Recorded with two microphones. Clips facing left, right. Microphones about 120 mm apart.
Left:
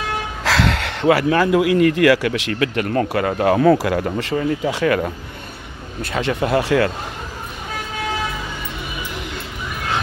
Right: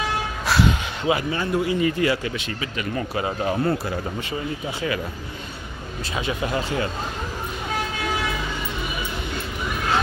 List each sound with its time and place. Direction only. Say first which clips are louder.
0.4 s speech: left 2 dB; 90° left; by 5.1 s 60° left (ahead or behind)
6.1 s speech: left 7 dB; 70° left (ahead or behind)